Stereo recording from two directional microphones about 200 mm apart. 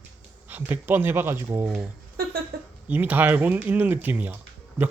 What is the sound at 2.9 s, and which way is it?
Speech, 10° right (ahead or behind).